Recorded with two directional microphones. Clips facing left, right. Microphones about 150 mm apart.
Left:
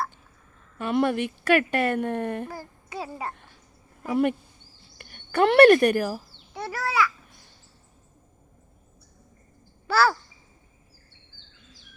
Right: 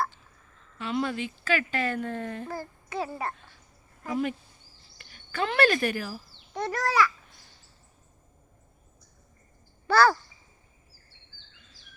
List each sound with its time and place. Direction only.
0.8 s speech: 55° left (ahead or behind)
2.5 s a child's voice: 10° left (ahead or behind)
4.1 s speech: 60° left (ahead or behind)
6.5 s babbling: 5° left (ahead or behind)
9.8 s speech: 5° left (ahead or behind)